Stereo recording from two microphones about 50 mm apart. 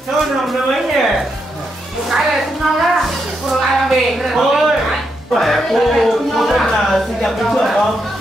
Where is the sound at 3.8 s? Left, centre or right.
Centre.